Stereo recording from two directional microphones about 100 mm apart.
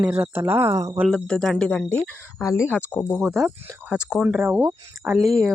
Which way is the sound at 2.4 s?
35° left (ahead or behind).